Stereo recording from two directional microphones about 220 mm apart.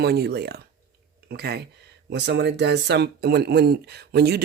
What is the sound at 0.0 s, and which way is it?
Speech, 45° right (ahead or behind).